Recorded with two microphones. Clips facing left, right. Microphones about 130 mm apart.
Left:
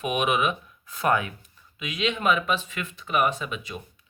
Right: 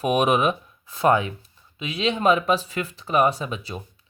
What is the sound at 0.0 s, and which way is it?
Speech, 35° right (ahead or behind).